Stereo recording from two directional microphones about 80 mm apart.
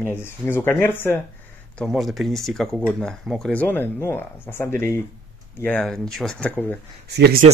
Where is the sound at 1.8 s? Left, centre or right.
Centre.